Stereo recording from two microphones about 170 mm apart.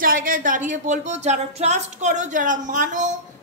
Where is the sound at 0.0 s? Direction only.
55° right (ahead or behind).